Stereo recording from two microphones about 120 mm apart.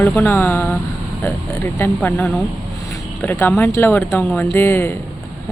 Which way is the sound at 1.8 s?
15° left (ahead or behind).